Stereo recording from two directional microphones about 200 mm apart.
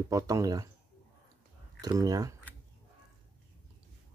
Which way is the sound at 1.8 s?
20° right (ahead or behind).